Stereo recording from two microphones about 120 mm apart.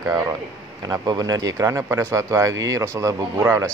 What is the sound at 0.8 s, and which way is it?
Speech, 30° right (ahead or behind).